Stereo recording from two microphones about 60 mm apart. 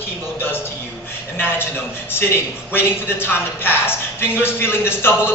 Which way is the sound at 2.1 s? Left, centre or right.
Left.